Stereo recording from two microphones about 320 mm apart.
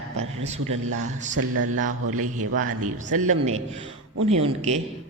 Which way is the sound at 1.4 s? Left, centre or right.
Right.